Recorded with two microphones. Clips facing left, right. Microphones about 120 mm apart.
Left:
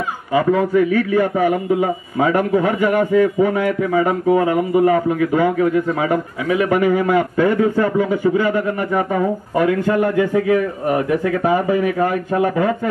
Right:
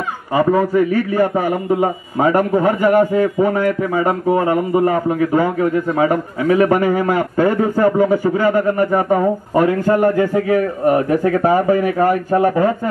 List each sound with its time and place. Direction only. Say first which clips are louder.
0.3 s a man's voice: right 1 dB; 40° right (ahead or behind)